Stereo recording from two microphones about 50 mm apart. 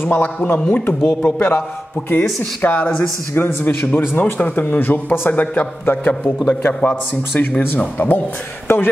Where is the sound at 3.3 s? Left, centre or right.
Left.